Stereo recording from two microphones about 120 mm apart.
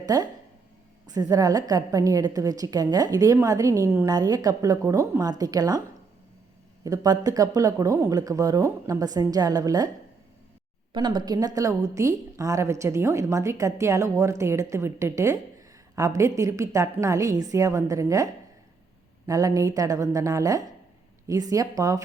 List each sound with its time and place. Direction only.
0.0 s a woman's voice: 30° right (ahead or behind)
6.8 s speech: 30° right (ahead or behind)
10.9 s a woman's voice: 40° right (ahead or behind)